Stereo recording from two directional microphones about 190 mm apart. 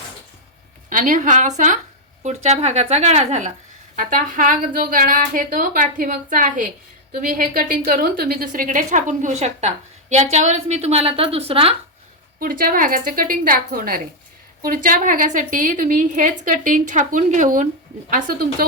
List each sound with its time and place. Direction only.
0.9 s a woman's voice: 45° right (ahead or behind)
12.4 s a woman's voice: 50° right (ahead or behind)